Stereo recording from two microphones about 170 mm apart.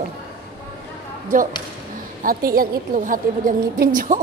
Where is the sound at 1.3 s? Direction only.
55° right (ahead or behind).